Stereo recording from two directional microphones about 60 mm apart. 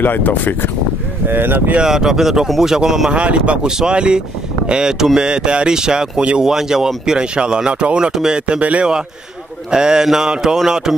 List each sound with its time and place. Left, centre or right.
0.0 s speech: left
1.2 s speech: right
1.8 s speech: centre
3.2 s speech: centre
8.5 s speech: right